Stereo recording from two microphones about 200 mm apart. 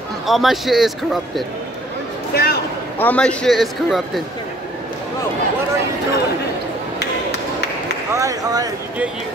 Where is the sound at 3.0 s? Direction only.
5° left (ahead or behind).